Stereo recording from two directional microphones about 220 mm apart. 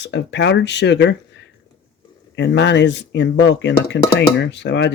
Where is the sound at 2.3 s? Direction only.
50° left (ahead or behind).